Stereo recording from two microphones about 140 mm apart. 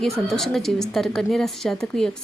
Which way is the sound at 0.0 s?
Centre (ahead or behind).